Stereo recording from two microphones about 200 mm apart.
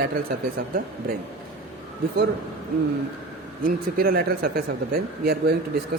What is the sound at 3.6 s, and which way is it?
Speech, 45° right (ahead or behind).